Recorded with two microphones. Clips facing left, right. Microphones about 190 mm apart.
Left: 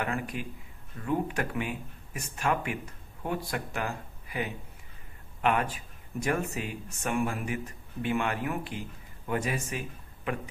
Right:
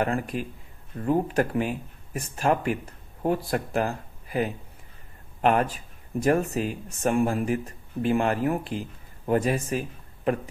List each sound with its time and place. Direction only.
0.0 s a man's voice: 35° right (ahead or behind)